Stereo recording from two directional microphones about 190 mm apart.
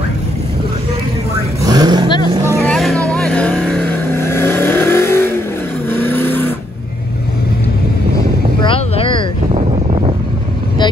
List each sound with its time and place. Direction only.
1.6 s vehicle: 20° right (ahead or behind)
2.6 s vehicle: 5° left (ahead or behind)
8.6 s a sound: 30° left (ahead or behind)